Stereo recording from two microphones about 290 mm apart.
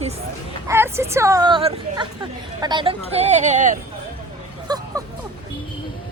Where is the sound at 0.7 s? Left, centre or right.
Centre; by 3.8 s right.